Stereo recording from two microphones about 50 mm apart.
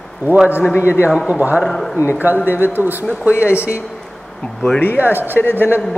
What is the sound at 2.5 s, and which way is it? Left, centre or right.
Speech, right.